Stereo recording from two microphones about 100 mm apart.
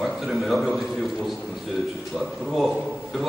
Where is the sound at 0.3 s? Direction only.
Centre (ahead or behind).